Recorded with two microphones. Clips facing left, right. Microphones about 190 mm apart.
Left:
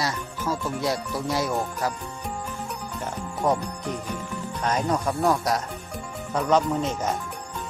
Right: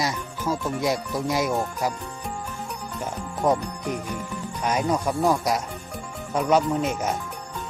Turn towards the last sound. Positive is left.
turn(degrees=-10)  # may be behind; listen again after turning